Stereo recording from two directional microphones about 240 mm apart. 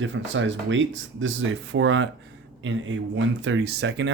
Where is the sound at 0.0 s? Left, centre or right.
Right.